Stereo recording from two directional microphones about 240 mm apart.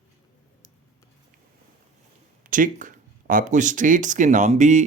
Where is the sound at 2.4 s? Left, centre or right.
Right.